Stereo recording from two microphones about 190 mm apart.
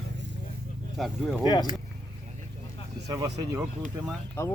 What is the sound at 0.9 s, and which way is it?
Speech, centre (ahead or behind).